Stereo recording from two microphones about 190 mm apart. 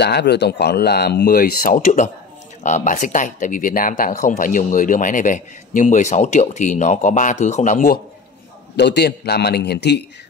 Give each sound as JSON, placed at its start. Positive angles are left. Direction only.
{"t": 0.0, "sound": "speech", "side_deg": 60}
{"t": 8.7, "sound": "speech", "side_deg": 60}